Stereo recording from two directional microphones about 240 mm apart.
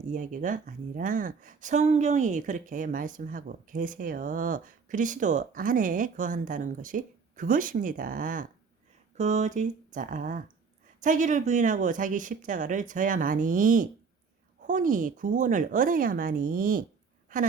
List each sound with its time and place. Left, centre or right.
0.1 s a woman's voice: right